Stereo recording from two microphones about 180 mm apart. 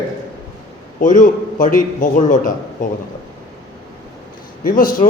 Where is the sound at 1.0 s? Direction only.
45° left (ahead or behind).